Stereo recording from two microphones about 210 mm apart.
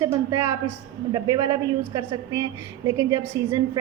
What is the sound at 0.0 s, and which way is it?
A woman's voice, 15° right (ahead or behind).